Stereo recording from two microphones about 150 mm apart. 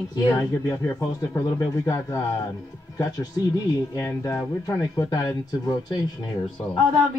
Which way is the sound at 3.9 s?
20° left (ahead or behind).